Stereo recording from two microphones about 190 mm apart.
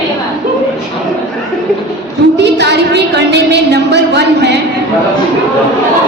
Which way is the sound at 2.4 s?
65° right (ahead or behind).